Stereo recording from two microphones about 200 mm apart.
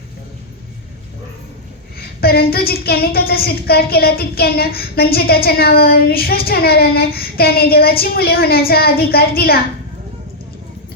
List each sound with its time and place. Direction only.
2.2 s child singing: 50° left (ahead or behind)